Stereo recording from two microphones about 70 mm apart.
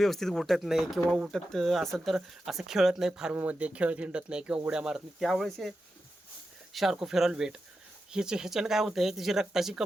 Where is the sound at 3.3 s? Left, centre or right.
Right; by 5.7 s centre.